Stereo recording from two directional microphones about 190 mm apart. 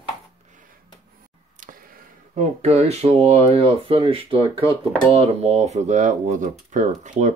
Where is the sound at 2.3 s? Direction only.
35° right (ahead or behind).